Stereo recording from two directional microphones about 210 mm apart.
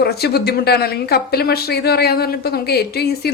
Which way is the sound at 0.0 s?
50° left (ahead or behind).